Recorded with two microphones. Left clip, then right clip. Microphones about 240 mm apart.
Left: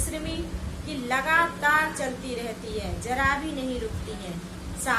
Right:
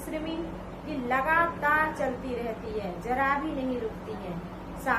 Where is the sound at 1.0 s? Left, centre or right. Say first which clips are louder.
Left 2 dB; left.